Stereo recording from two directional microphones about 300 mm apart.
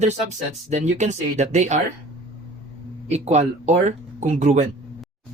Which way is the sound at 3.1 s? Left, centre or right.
Right.